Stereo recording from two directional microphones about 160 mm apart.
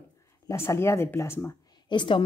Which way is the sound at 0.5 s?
15° left (ahead or behind).